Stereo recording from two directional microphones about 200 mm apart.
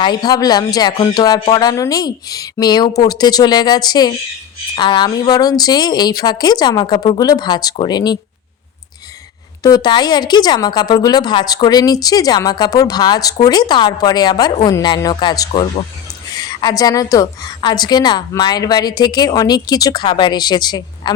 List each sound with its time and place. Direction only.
0.0 s a woman's voice: 20° left (ahead or behind)
9.6 s a woman's voice: 20° left (ahead or behind)